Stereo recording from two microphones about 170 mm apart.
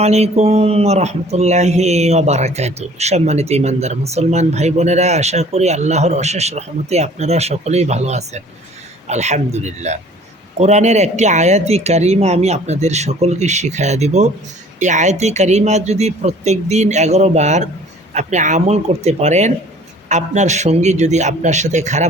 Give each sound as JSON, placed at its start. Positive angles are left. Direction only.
{"t": 0.0, "sound": "a man's voice", "side_deg": -40}